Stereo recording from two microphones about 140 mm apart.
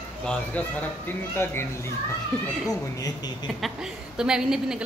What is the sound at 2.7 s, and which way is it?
Speech, 25° left (ahead or behind).